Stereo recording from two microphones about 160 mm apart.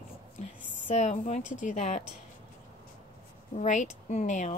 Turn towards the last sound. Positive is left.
turn(degrees=50)  # may be behind; listen again after turning